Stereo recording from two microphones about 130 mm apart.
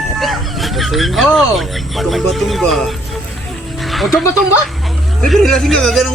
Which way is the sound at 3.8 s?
Centre (ahead or behind).